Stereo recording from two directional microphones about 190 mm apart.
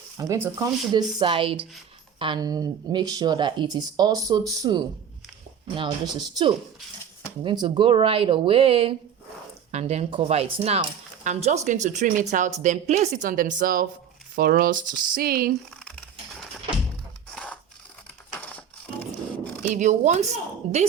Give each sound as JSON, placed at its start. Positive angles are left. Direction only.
{"t": 0.2, "sound": "speech", "side_deg": -15}
{"t": 1.2, "sound": "speech", "side_deg": -30}
{"t": 6.1, "sound": "a woman's voice", "side_deg": -20}
{"t": 17.3, "sound": "scissors", "side_deg": 5}
{"t": 18.3, "sound": "crushing", "side_deg": 10}
{"t": 19.7, "sound": "a woman's voice", "side_deg": -40}